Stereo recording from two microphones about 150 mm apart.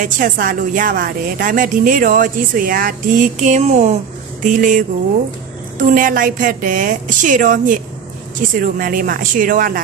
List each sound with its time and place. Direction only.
0.0 s a woman's voice: 65° right (ahead or behind)